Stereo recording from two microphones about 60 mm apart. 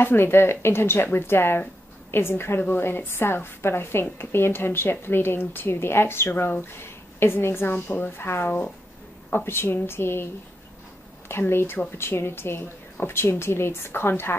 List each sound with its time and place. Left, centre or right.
0.0 s a woman's voice: left
11.2 s a woman's voice: left